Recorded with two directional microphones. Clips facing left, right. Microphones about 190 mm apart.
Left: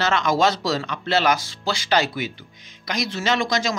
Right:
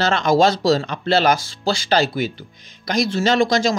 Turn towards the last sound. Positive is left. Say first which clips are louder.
# right 5 dB
turn(degrees=-30)  # may be behind; listen again after turning